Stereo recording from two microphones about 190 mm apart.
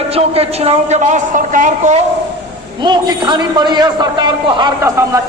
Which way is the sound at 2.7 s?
25° right (ahead or behind).